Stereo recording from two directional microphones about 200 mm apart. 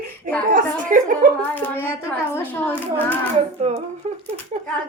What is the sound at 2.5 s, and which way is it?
Speech, 10° left (ahead or behind).